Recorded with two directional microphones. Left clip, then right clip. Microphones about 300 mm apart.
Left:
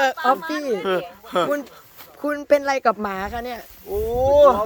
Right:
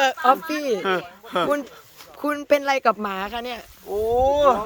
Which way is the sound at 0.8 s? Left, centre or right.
Centre.